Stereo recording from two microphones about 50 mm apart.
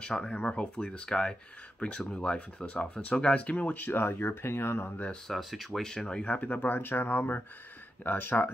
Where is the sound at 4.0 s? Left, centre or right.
Left.